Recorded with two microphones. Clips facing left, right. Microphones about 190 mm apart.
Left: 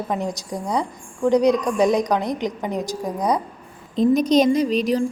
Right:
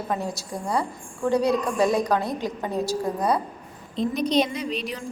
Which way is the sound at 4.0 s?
45° left (ahead or behind).